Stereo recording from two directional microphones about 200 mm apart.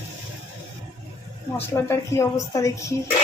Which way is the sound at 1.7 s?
15° left (ahead or behind).